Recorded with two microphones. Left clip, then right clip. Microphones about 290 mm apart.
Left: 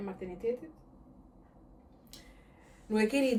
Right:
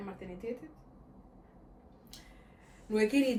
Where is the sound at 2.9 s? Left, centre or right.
Left.